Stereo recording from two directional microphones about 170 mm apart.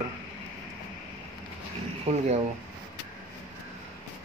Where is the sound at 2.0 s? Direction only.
40° right (ahead or behind).